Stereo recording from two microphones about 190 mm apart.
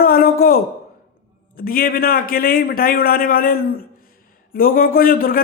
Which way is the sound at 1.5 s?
50° left (ahead or behind).